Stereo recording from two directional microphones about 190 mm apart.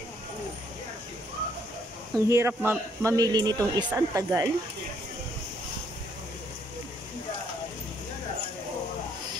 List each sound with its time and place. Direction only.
2.1 s speech: 15° right (ahead or behind)